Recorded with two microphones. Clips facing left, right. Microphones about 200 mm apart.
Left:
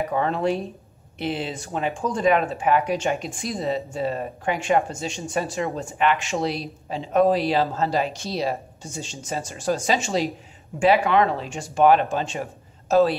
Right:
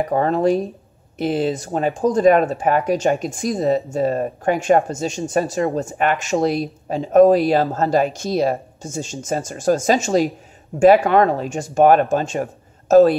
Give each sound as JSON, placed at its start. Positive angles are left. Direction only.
{"t": 0.1, "sound": "speech", "side_deg": -40}